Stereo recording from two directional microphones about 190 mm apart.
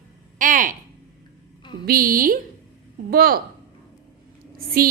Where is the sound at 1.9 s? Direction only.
50° right (ahead or behind).